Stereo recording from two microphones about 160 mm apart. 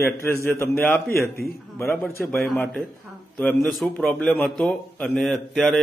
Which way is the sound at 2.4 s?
Centre (ahead or behind).